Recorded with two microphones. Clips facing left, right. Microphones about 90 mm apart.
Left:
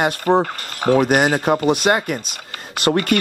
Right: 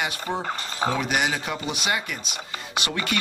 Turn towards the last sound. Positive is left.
turn(degrees=50)  # may be behind; listen again after turning